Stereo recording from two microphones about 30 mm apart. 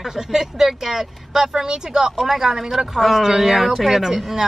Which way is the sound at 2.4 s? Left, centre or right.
Centre.